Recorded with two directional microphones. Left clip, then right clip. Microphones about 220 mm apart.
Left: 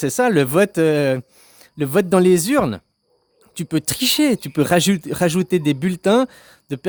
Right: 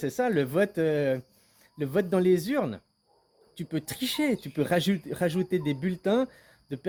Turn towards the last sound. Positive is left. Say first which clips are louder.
# left 10 dB
turn(degrees=45)  # may be behind; listen again after turning